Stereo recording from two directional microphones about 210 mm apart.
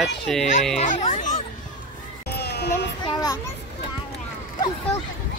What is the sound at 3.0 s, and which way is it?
Speech, 15° left (ahead or behind).